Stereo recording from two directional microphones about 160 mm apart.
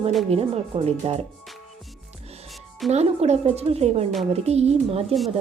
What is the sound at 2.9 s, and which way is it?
Speech, 45° right (ahead or behind).